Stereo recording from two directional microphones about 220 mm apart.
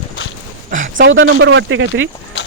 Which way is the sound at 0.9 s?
60° right (ahead or behind).